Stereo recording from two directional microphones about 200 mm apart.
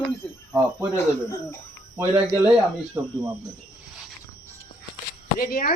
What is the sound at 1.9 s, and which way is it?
Speech, 10° right (ahead or behind).